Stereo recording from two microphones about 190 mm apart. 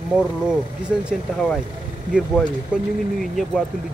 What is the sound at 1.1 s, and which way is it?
Speech, 5° left (ahead or behind).